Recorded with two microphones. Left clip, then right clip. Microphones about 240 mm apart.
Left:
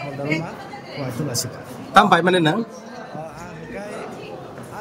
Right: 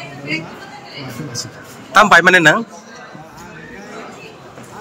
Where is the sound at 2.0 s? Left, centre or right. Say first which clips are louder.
Right 6 dB; right.